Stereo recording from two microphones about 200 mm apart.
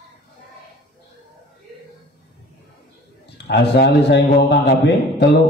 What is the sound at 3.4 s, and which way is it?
A man's voice, 55° left (ahead or behind).